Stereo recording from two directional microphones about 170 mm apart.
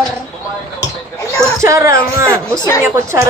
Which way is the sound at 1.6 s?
20° right (ahead or behind).